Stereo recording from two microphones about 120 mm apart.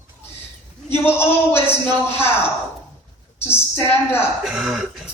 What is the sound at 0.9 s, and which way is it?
A man's voice, 20° left (ahead or behind).